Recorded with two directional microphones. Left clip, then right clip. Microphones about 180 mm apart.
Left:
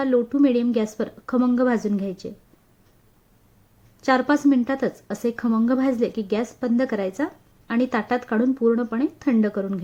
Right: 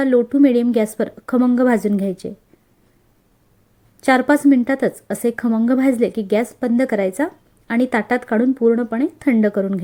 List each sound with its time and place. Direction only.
0.0 s a woman's voice: 25° right (ahead or behind)
4.0 s a woman's voice: 25° right (ahead or behind)